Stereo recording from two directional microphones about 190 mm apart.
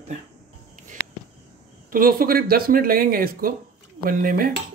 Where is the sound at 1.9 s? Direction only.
50° right (ahead or behind).